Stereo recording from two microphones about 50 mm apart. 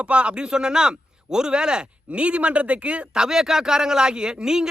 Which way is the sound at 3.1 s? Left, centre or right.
Centre.